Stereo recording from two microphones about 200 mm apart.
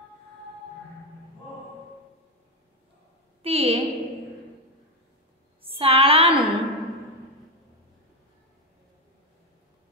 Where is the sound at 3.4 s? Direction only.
30° right (ahead or behind).